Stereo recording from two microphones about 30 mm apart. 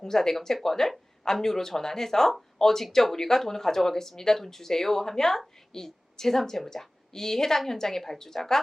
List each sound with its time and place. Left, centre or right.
0.0 s a woman's voice: centre